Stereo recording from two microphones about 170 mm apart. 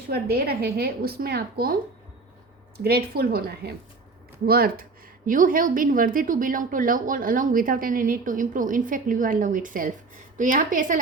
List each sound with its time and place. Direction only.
0.1 s a woman's voice: 65° right (ahead or behind)
2.8 s a woman's voice: 65° right (ahead or behind)